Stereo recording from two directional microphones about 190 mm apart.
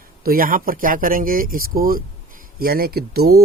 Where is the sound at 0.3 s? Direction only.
50° right (ahead or behind).